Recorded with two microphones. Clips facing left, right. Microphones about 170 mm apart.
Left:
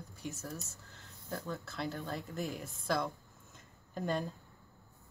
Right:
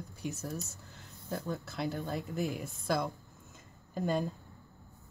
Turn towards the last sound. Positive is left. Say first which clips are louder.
# right 3 dB
turn(degrees=-5)  # may be behind; listen again after turning